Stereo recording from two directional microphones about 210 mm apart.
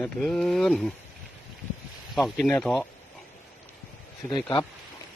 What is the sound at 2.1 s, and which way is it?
Speech, centre (ahead or behind).